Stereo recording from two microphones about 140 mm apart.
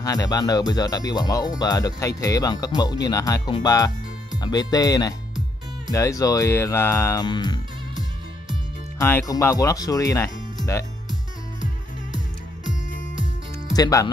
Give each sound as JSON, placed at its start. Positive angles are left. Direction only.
{"t": 0.0, "sound": "speech", "side_deg": 25}
{"t": 7.2, "sound": "music", "side_deg": 30}
{"t": 8.9, "sound": "speech", "side_deg": 20}
{"t": 13.7, "sound": "speech", "side_deg": 25}